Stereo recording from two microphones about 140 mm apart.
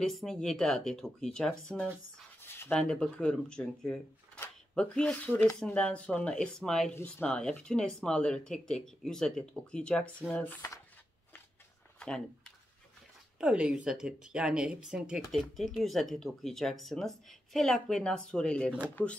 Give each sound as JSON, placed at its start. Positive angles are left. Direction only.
{"t": 0.0, "sound": "speech", "side_deg": 0}
{"t": 2.4, "sound": "a sound", "side_deg": 15}
{"t": 2.7, "sound": "speech", "side_deg": 5}
{"t": 13.4, "sound": "speech", "side_deg": -5}